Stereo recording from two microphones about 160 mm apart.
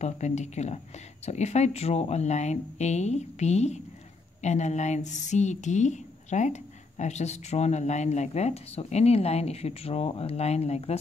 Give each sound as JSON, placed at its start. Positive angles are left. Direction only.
{"t": 0.0, "sound": "speech", "side_deg": 45}